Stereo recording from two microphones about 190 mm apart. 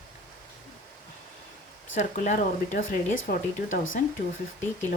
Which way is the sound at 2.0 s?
40° left (ahead or behind).